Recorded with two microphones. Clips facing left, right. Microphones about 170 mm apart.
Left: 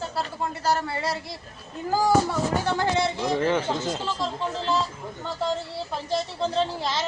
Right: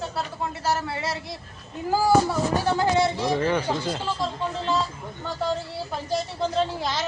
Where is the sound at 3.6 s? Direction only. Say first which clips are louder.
Right 1 dB; 20° left (ahead or behind).